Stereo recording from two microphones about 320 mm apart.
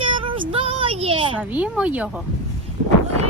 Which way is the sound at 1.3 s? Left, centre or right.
Centre.